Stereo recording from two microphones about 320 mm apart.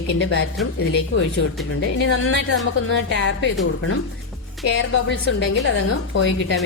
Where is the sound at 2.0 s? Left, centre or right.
Left.